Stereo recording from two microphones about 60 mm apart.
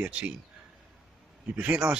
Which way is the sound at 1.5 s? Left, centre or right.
Centre.